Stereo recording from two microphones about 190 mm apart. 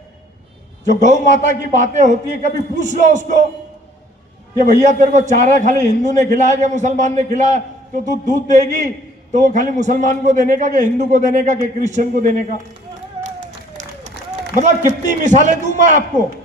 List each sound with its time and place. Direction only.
0.9 s a man's voice: 40° right (ahead or behind)
4.6 s a man's voice: 40° right (ahead or behind)
13.7 s a man's voice: 35° right (ahead or behind)